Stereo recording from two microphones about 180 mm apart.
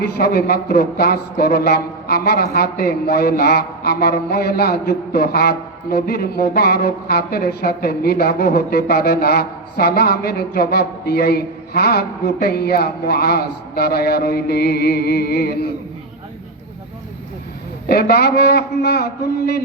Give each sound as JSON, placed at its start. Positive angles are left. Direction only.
{"t": 0.0, "sound": "a man's voice", "side_deg": 60}
{"t": 17.8, "sound": "a man's voice", "side_deg": 60}